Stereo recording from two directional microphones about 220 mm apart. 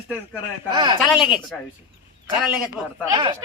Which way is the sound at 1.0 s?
5° right (ahead or behind).